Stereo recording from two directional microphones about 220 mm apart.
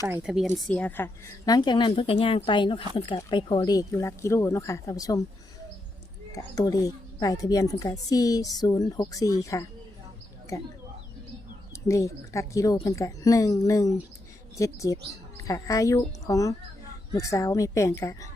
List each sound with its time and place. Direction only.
0.0 s a woman's voice: 10° right (ahead or behind); by 5.2 s 15° left (ahead or behind)
6.3 s a woman's voice: 15° left (ahead or behind)
11.7 s a woman's voice: 15° left (ahead or behind)